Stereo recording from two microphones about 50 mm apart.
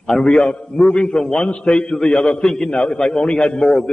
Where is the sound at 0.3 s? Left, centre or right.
Centre.